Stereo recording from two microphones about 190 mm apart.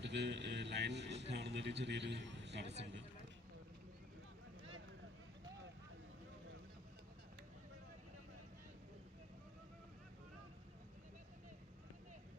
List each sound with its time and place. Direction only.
0.0 s a man's voice: 65° right (ahead or behind)